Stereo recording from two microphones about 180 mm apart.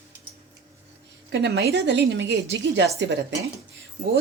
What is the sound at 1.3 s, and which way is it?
A woman's voice, 75° right (ahead or behind).